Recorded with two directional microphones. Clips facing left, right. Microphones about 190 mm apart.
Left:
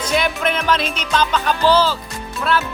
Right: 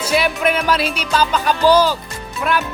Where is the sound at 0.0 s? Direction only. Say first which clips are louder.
Right 2 dB; 5° right (ahead or behind).